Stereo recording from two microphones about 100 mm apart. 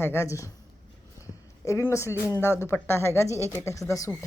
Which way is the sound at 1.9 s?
30° left (ahead or behind).